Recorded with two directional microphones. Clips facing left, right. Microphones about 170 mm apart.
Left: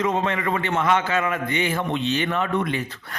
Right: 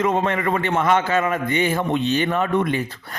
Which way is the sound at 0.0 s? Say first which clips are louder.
Right 3 dB; 50° right (ahead or behind).